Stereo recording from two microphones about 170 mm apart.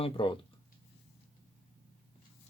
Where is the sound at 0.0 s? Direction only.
30° left (ahead or behind).